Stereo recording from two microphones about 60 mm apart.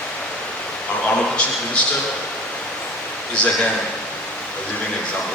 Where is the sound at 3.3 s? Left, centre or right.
Centre.